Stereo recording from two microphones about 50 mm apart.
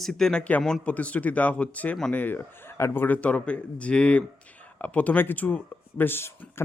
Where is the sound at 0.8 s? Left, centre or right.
Left.